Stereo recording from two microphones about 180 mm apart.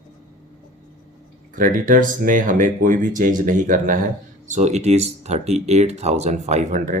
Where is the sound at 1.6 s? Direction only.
50° right (ahead or behind).